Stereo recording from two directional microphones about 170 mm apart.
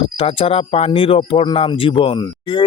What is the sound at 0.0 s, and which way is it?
Speech, 35° left (ahead or behind).